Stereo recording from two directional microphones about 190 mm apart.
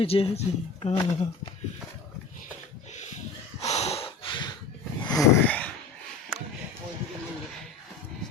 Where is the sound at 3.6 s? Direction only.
35° left (ahead or behind).